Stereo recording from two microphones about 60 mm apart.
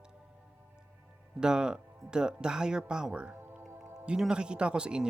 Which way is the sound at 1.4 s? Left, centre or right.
Centre.